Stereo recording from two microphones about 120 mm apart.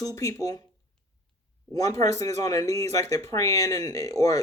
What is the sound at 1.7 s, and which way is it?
Speech, 30° left (ahead or behind).